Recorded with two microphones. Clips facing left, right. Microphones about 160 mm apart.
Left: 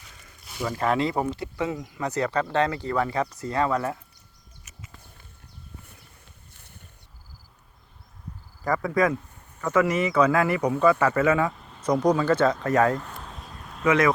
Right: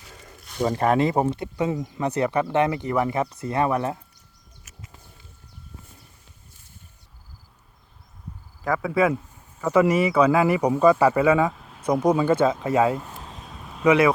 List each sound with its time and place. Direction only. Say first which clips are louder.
0.6 s speech: right 5 dB; 40° right (ahead or behind)
0.9 s speech: right 3 dB; 20° right (ahead or behind)
6.5 s boat: left 1 dB; 65° left (ahead or behind)
8.6 s speech: right 2 dB; 5° right (ahead or behind)
11.5 s vehicle: right 1 dB; 5° right (ahead or behind)
12.1 s speech: right 2 dB; 15° right (ahead or behind)
13.2 s a sound: right 1 dB; centre (ahead or behind)
13.8 s speech: right 3 dB; 10° right (ahead or behind)